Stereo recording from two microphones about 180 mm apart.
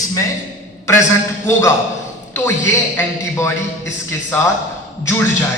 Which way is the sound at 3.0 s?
15° left (ahead or behind).